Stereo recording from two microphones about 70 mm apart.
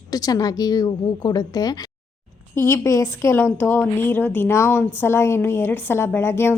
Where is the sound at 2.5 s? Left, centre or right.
Left.